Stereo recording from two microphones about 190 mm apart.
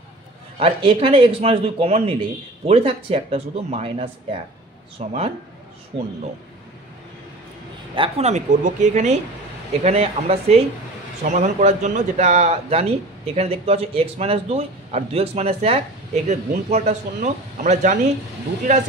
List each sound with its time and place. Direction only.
0.6 s speech: 30° right (ahead or behind)
7.9 s speech: 30° right (ahead or behind)